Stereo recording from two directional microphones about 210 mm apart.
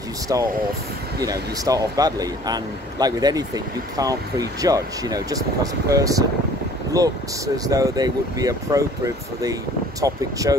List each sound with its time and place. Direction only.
0.3 s speech: 15° right (ahead or behind)